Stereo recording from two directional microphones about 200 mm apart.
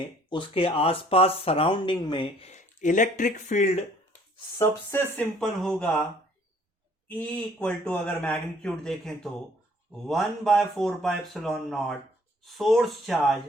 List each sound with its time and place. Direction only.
0.3 s speech: 25° left (ahead or behind)
4.5 s a man's voice: 10° left (ahead or behind)
7.1 s a man's voice: 10° left (ahead or behind)